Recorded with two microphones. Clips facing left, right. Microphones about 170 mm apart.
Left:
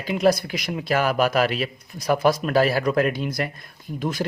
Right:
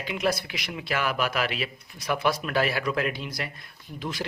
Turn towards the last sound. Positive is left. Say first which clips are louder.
# left 7 dB
turn(degrees=45)  # may be behind; listen again after turning